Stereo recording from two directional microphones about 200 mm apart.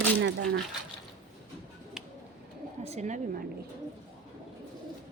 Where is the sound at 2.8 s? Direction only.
35° right (ahead or behind).